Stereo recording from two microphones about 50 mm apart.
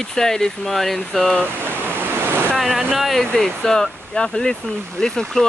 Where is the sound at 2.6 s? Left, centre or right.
Centre.